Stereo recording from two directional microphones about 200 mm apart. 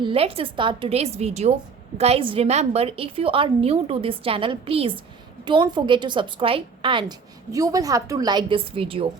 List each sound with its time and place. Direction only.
0.0 s a woman's voice: 25° right (ahead or behind)